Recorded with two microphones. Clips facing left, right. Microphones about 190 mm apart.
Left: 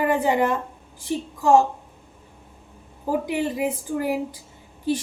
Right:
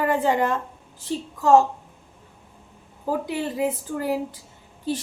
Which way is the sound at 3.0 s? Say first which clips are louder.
Left 2 dB; 15° left (ahead or behind).